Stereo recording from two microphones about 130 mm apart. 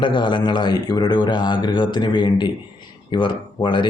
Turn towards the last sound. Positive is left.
turn(degrees=35)  # may be behind; listen again after turning